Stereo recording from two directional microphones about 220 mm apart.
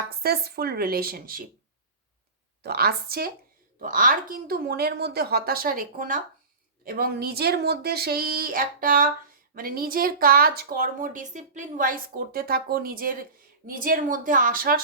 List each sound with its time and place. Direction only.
0.1 s a woman's voice: 45° right (ahead or behind)
2.6 s a woman's voice: 45° right (ahead or behind)